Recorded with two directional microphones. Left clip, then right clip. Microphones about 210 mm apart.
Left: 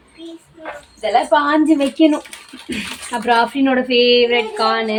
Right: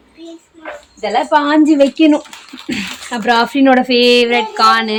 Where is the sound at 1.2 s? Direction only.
50° right (ahead or behind).